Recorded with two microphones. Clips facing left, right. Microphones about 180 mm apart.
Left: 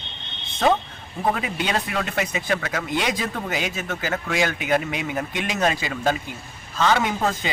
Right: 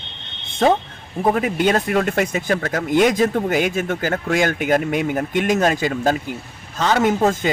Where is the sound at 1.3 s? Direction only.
50° right (ahead or behind).